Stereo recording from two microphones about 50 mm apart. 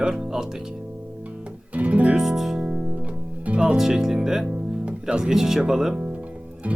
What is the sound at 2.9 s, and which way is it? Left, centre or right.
Music, right.